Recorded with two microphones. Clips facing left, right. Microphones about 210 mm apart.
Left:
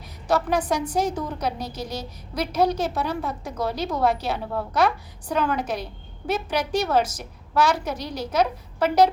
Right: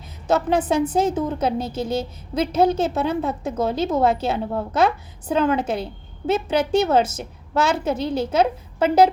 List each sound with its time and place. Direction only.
0.3 s a woman's voice: 25° right (ahead or behind)